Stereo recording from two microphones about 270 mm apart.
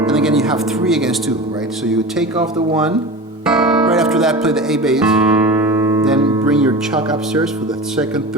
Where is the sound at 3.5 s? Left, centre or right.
Centre.